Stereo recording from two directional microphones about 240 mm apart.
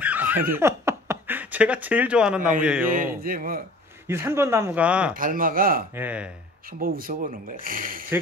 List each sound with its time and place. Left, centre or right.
0.0 s laughter: centre
0.5 s speech: centre
3.2 s speech: right
4.1 s speech: centre
5.1 s speech: right
5.9 s speech: centre
6.8 s speech: right